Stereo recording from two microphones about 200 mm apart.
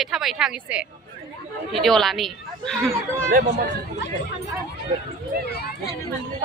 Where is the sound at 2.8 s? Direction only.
10° right (ahead or behind).